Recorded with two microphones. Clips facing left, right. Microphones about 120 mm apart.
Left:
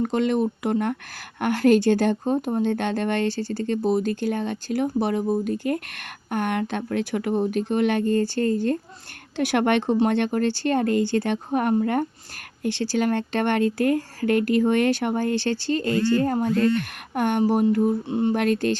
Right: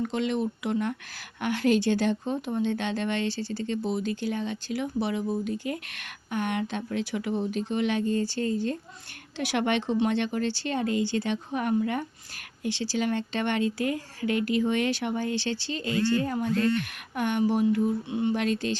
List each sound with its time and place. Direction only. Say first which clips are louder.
0.0 s speech: left 6 dB; 50° left (ahead or behind)
18.3 s speech: left 6 dB; 55° left (ahead or behind)